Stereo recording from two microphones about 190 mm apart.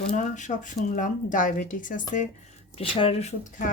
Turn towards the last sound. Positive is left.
turn(degrees=35)  # may be behind; listen again after turning